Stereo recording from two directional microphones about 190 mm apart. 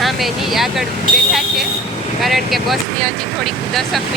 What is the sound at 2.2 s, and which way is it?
Speech, centre (ahead or behind).